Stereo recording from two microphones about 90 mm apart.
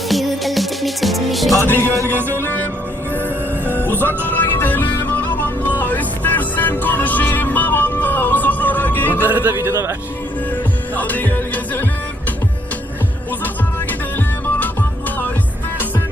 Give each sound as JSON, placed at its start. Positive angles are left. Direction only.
{"t": 0.1, "sound": "music", "side_deg": 0}
{"t": 1.6, "sound": "music", "side_deg": 20}
{"t": 2.0, "sound": "speech", "side_deg": -25}
{"t": 3.7, "sound": "music", "side_deg": 20}
{"t": 9.2, "sound": "speech", "side_deg": -20}
{"t": 10.9, "sound": "music", "side_deg": 20}
{"t": 14.6, "sound": "music", "side_deg": 20}